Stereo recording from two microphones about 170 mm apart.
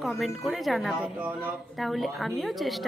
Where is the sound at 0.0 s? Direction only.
Centre (ahead or behind).